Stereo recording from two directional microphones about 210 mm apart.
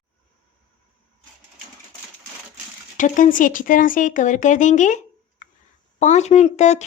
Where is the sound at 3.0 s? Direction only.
35° left (ahead or behind).